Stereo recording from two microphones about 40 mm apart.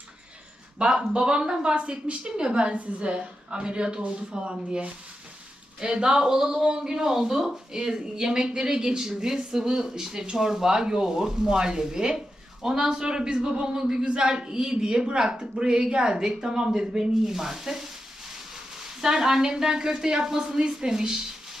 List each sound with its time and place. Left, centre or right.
0.8 s a woman's voice: centre